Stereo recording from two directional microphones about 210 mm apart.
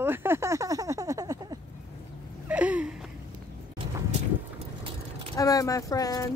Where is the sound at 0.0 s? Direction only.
10° right (ahead or behind).